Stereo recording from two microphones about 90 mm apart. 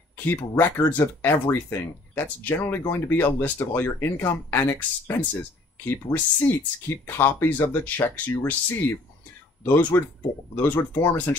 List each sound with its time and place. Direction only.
0.1 s speech: 20° left (ahead or behind)